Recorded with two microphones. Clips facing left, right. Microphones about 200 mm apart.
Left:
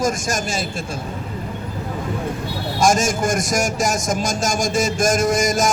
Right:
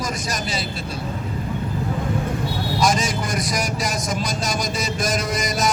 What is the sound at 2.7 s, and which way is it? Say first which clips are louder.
A man's voice: left 4 dB; 45° left (ahead or behind).